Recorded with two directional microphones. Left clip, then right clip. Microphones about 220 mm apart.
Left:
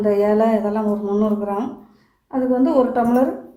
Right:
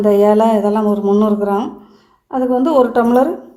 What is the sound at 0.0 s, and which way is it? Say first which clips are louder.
Speech: right 5 dB; 40° right (ahead or behind).